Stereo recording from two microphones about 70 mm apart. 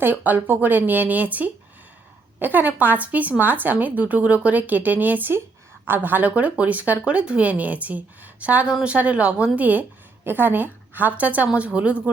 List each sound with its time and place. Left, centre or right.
0.0 s speech: right